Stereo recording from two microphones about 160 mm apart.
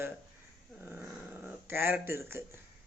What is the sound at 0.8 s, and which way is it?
Dog, 10° right (ahead or behind).